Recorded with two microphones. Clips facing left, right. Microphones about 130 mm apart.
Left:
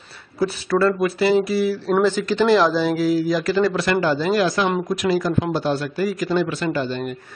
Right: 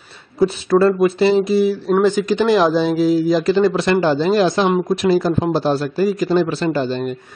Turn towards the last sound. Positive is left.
turn(degrees=-30)  # may be behind; listen again after turning